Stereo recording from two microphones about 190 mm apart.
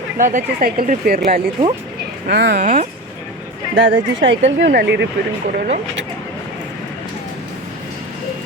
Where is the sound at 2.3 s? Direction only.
60° right (ahead or behind).